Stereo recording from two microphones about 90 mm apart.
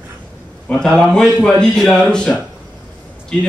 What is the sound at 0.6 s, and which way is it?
A man's voice, 10° left (ahead or behind).